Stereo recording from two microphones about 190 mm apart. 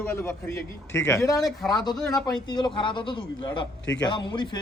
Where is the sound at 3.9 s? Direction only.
70° left (ahead or behind).